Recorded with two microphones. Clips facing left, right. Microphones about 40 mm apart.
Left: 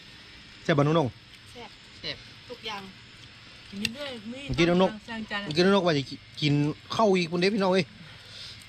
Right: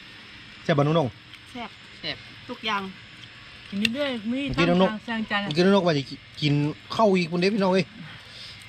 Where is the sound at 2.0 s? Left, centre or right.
Right.